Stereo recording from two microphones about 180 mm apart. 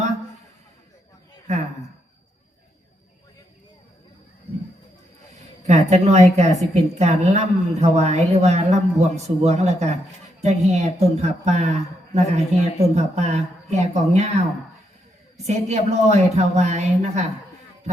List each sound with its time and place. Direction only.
5.6 s speech: 40° right (ahead or behind)
15.4 s speech: 40° right (ahead or behind)